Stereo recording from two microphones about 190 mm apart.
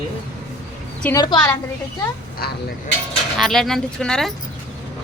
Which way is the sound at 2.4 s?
55° left (ahead or behind).